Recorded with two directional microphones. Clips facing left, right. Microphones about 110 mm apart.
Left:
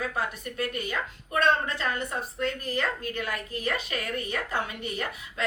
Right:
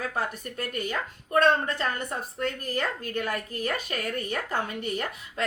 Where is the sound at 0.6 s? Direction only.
40° right (ahead or behind).